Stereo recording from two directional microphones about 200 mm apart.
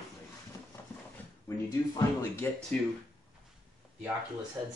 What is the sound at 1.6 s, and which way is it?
Speech, 15° left (ahead or behind).